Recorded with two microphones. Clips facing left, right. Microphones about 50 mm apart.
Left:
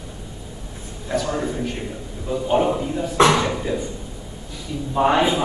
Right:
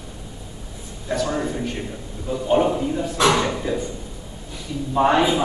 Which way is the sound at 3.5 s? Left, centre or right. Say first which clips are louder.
Even; centre.